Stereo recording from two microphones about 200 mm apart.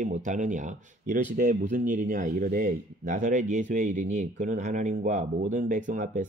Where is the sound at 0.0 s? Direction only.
40° right (ahead or behind).